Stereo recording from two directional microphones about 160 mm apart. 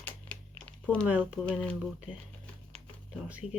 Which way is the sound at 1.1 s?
10° right (ahead or behind).